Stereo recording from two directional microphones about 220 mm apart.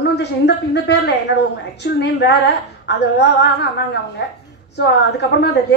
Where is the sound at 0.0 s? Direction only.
50° left (ahead or behind).